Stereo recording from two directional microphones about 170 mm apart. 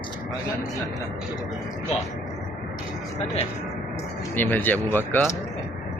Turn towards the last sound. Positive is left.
turn(degrees=10)  # may be behind; listen again after turning